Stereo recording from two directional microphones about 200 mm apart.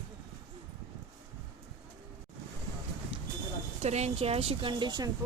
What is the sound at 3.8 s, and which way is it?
A woman's voice, 35° right (ahead or behind).